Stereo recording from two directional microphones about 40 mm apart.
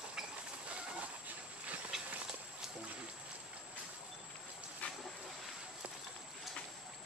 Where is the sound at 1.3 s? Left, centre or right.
Right.